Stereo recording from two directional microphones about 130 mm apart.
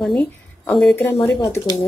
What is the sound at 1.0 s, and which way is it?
Speech, 15° left (ahead or behind).